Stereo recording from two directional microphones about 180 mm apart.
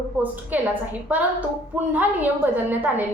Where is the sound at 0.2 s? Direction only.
10° right (ahead or behind).